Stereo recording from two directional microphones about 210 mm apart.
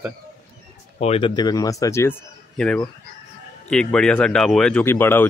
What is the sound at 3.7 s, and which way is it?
Speech, 5° left (ahead or behind).